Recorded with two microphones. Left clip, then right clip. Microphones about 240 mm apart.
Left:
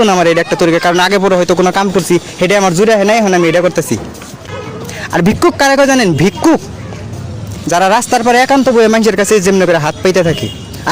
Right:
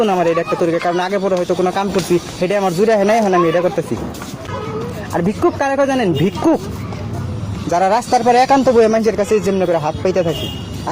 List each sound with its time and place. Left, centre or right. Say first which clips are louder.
0.0 s speech: left 6 dB; left
5.1 s speech: left 6 dB; left
7.7 s speech: left 4 dB; left